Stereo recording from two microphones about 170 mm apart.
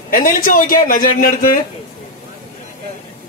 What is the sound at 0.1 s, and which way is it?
A man's voice, 55° left (ahead or behind).